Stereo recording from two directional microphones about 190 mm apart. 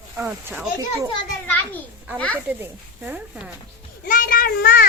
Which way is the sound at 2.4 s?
10° right (ahead or behind).